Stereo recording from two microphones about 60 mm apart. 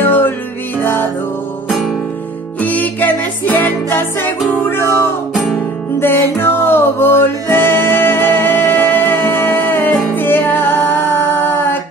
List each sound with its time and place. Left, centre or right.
0.0 s music: left
1.7 s music: centre
2.6 s music: left
5.9 s music: left